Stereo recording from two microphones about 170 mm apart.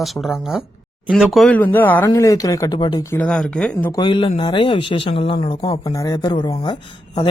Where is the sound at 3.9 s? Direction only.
30° left (ahead or behind).